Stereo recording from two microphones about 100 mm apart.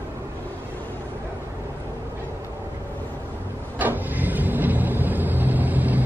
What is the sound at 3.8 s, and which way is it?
Vehicle, 20° right (ahead or behind).